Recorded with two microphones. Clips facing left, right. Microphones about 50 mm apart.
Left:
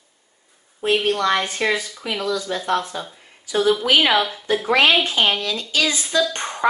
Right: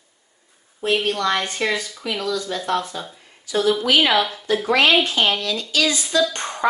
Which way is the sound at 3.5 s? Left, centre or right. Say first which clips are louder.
Left 1 dB; centre.